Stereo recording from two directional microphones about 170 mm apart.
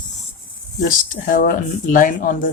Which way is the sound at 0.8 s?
55° left (ahead or behind).